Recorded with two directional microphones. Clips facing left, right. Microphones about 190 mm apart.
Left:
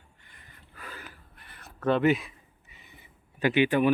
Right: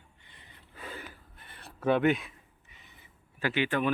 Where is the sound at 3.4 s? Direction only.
15° left (ahead or behind).